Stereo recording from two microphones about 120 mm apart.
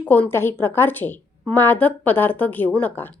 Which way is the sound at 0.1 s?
15° left (ahead or behind).